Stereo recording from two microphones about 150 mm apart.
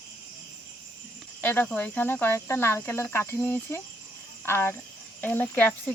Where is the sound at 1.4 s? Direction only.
10° left (ahead or behind).